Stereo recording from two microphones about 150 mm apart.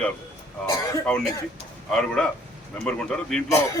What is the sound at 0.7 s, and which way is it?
Cough, 20° left (ahead or behind).